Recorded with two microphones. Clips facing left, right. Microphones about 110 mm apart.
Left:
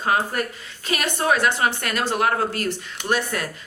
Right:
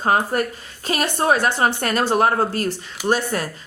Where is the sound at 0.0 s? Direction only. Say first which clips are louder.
Right 3 dB; 35° right (ahead or behind).